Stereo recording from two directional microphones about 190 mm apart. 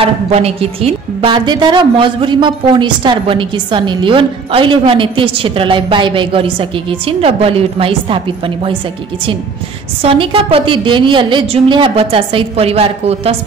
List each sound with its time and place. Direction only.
0.0 s a woman's voice: 30° right (ahead or behind)
10.0 s a woman's voice: 30° right (ahead or behind)